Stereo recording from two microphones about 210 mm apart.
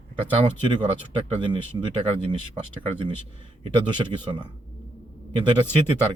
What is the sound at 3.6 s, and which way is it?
Speech, 20° right (ahead or behind).